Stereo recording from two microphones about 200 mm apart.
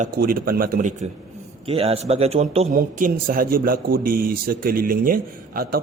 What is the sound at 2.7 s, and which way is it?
Speech, 45° right (ahead or behind).